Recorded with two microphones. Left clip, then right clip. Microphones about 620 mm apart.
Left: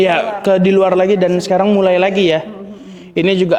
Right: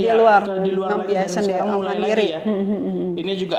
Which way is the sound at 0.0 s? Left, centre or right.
Left.